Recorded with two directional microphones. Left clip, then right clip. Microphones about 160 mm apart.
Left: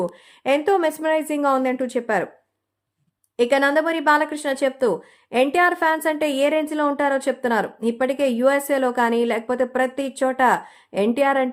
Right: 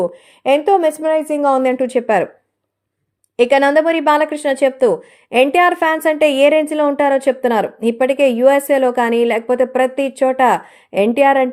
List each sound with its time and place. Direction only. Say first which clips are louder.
0.4 s a woman's voice: right 6 dB; centre (ahead or behind)
1.6 s a woman's voice: right 8 dB; 20° right (ahead or behind)
3.3 s speech: right 6 dB; 15° right (ahead or behind)